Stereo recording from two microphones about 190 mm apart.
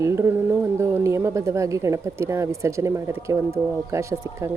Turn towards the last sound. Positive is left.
turn(degrees=-15)  # may be behind; listen again after turning